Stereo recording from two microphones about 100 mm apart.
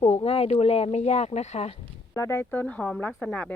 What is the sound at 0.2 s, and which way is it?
Speech, 80° left.